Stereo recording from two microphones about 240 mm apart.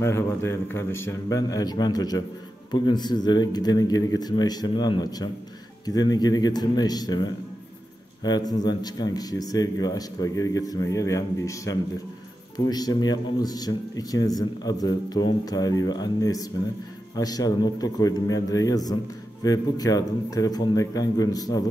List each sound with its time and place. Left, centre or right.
0.0 s speech: centre